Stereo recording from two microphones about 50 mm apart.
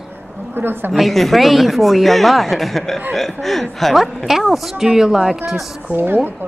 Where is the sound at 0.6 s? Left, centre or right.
Right.